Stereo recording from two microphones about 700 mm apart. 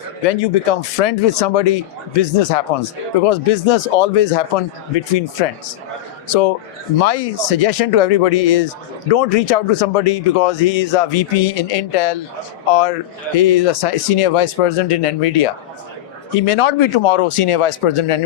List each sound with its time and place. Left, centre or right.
0.3 s speech: left